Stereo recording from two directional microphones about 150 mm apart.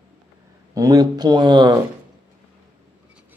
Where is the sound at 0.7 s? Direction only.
25° right (ahead or behind).